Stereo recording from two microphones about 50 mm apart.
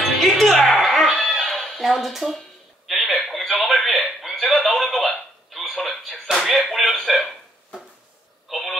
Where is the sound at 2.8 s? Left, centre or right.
Centre.